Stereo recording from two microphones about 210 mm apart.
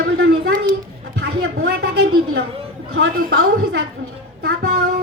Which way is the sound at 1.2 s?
50° right (ahead or behind).